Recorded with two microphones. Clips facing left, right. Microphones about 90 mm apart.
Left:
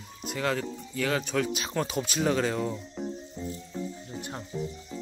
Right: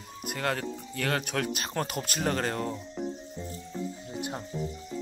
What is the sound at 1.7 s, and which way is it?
Speech, centre (ahead or behind).